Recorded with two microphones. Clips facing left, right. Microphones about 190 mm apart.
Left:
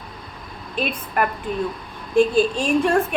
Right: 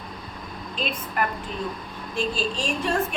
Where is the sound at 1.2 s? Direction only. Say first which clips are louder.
Left 6 dB; 55° left (ahead or behind).